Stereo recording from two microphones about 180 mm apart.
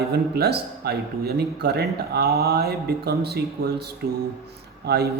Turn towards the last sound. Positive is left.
turn(degrees=-65)  # may be behind; listen again after turning